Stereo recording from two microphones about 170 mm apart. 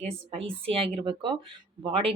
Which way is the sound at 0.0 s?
35° right (ahead or behind).